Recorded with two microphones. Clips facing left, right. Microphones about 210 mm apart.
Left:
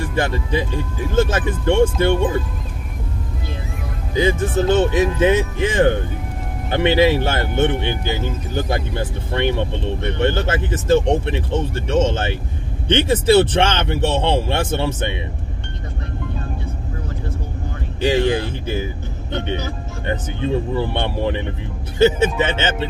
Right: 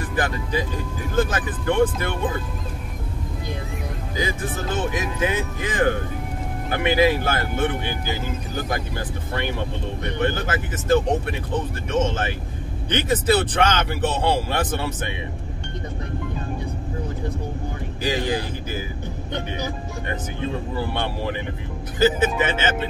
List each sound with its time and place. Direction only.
0.1 s speech: 25° left (ahead or behind)
4.9 s speech: 25° left (ahead or behind)
18.0 s speech: 25° left (ahead or behind)
20.7 s speech: 25° left (ahead or behind)